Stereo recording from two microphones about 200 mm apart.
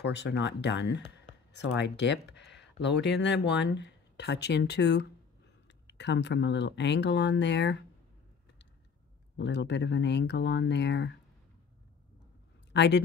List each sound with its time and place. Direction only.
0.0 s speech: 60° left (ahead or behind)
9.4 s speech: 60° left (ahead or behind)
12.7 s speech: 60° left (ahead or behind)